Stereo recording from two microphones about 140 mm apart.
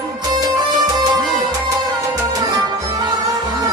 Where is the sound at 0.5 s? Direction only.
30° right (ahead or behind).